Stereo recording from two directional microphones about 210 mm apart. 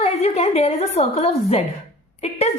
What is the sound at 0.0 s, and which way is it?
A woman's voice, 30° left (ahead or behind).